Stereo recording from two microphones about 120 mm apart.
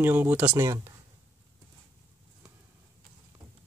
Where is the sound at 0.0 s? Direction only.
15° right (ahead or behind).